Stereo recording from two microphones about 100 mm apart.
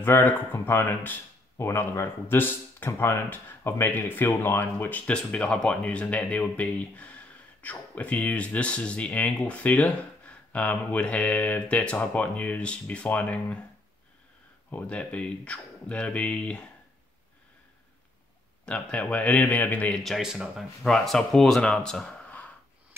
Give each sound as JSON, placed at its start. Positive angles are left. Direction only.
{"t": 0.0, "sound": "speech", "side_deg": 20}
{"t": 14.7, "sound": "speech", "side_deg": 15}
{"t": 18.7, "sound": "speech", "side_deg": 10}
{"t": 20.0, "sound": "speech", "side_deg": 0}